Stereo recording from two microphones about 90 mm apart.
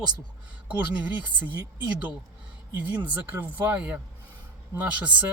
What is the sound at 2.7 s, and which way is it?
Speech, 20° right (ahead or behind).